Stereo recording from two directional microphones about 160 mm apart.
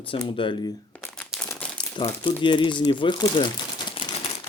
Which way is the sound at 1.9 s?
30° left (ahead or behind).